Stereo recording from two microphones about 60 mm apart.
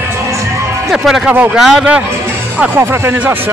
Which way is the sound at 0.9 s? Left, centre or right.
Centre.